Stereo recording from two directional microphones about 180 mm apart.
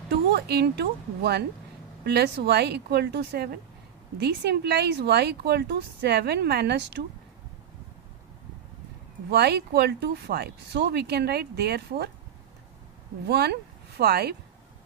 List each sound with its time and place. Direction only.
0.1 s speech: 65° right (ahead or behind)
9.3 s speech: 65° right (ahead or behind)
13.3 s speech: 65° right (ahead or behind)